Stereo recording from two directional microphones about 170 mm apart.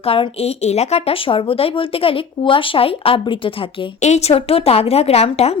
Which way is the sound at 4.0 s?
40° left (ahead or behind).